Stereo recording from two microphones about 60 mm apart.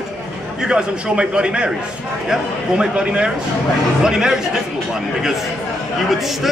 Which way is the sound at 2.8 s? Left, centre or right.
Centre.